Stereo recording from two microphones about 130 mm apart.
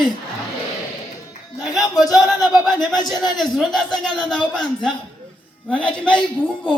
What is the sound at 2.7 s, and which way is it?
Speech, 35° left (ahead or behind).